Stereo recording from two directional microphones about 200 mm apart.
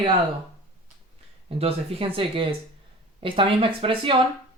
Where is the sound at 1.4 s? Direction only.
30° right (ahead or behind).